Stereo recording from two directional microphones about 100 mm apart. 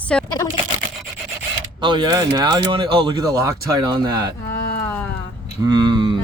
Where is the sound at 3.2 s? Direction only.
35° right (ahead or behind).